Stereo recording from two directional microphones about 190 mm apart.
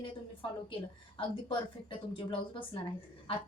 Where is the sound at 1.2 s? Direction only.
25° left (ahead or behind).